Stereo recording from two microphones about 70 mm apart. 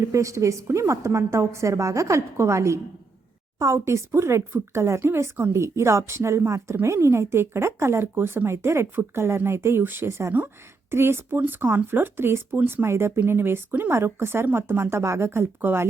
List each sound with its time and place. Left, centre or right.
0.1 s a woman's voice: right
3.8 s speech: right